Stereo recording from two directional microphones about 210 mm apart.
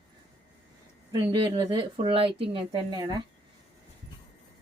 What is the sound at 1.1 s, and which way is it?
A woman's voice, 20° right (ahead or behind).